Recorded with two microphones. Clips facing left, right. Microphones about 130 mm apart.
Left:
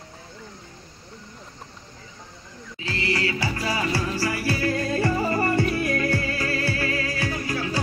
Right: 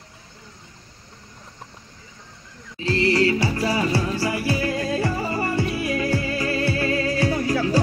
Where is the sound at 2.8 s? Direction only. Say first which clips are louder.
Right 8 dB; 30° right (ahead or behind).